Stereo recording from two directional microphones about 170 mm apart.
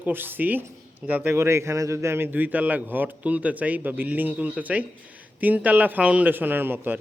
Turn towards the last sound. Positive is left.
turn(degrees=-10)  # may be behind; listen again after turning